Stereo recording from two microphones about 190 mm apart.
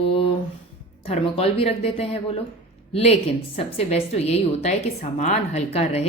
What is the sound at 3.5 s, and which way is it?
A woman's voice, 35° left (ahead or behind).